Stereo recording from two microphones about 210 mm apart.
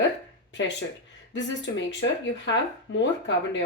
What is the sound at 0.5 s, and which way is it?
Speech, 60° left (ahead or behind).